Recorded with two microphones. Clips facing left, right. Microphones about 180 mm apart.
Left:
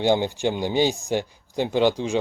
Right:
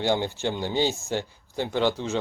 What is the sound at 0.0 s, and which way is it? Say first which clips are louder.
Speech: left 4 dB; 15° left (ahead or behind).